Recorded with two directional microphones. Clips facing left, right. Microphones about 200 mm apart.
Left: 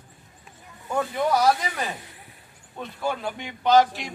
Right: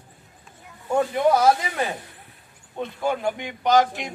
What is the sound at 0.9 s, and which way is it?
Speech, 25° right (ahead or behind).